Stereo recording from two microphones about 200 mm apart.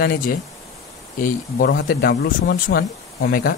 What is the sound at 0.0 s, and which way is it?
Speech, 50° left (ahead or behind).